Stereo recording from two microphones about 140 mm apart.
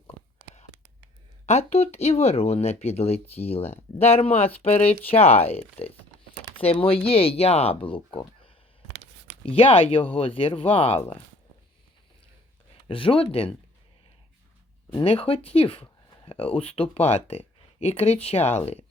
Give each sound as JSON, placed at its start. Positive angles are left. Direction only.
{"t": 1.5, "sound": "speech", "side_deg": 50}
{"t": 12.9, "sound": "speech", "side_deg": 40}
{"t": 15.0, "sound": "speech", "side_deg": 45}